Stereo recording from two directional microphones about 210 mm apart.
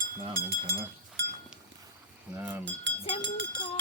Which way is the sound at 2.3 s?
10° right (ahead or behind).